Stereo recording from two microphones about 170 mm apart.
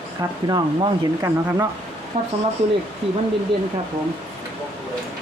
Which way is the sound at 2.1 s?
40° right (ahead or behind).